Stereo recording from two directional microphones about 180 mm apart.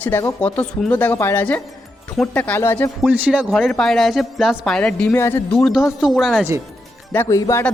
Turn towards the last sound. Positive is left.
turn(degrees=15)  # may be behind; listen again after turning